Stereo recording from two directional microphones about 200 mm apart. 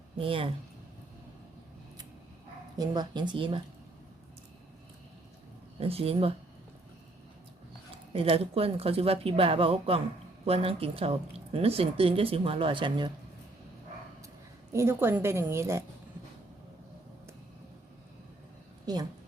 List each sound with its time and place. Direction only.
0.2 s speech: 25° right (ahead or behind)
2.7 s speech: 20° right (ahead or behind)
5.8 s speech: 30° right (ahead or behind)
8.1 s speech: 25° right (ahead or behind)
14.7 s a woman's voice: 15° right (ahead or behind)